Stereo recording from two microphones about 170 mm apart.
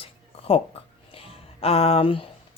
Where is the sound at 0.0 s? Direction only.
35° left (ahead or behind).